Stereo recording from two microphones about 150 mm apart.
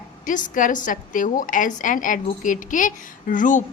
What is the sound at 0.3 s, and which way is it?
A woman's voice, 60° left (ahead or behind).